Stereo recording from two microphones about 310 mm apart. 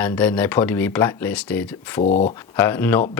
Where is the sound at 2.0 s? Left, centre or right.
Left.